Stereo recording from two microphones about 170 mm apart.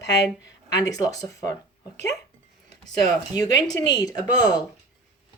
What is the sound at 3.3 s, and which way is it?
Speech, 20° left (ahead or behind).